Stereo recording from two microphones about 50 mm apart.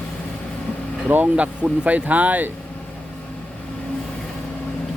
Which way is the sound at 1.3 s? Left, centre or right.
Right.